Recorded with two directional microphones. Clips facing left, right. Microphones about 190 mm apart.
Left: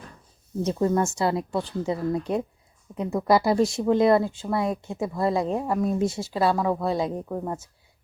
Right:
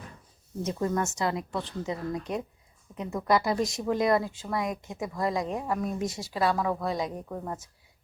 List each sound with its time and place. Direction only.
0.6 s a woman's voice: 30° left (ahead or behind)
7.3 s speech: 10° left (ahead or behind)